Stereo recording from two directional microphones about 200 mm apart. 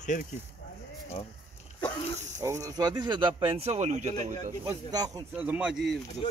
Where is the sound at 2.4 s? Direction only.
15° right (ahead or behind); by 4.4 s 35° right (ahead or behind).